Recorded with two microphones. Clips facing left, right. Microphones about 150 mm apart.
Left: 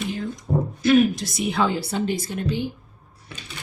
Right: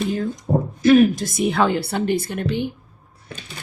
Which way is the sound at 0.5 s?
35° right (ahead or behind).